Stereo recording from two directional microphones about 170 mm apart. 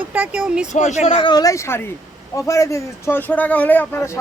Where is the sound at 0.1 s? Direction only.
10° right (ahead or behind).